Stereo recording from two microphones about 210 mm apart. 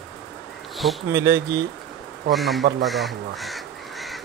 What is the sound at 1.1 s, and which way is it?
Speech, 10° right (ahead or behind).